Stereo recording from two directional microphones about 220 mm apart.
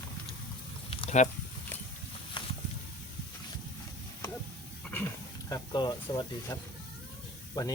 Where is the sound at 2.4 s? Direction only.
20° left (ahead or behind).